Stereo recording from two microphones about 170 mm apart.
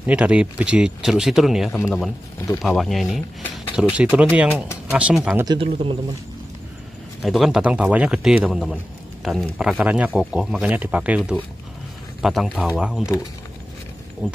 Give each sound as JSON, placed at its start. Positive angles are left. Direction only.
{"t": 0.0, "sound": "speech", "side_deg": -5}
{"t": 5.4, "sound": "speech", "side_deg": -30}
{"t": 7.2, "sound": "speech", "side_deg": 0}
{"t": 14.2, "sound": "speech", "side_deg": -5}